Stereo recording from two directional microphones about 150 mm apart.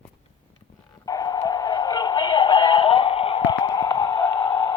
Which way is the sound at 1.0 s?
25° left (ahead or behind).